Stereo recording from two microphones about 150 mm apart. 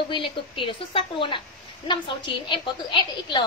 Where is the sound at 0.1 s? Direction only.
35° left (ahead or behind).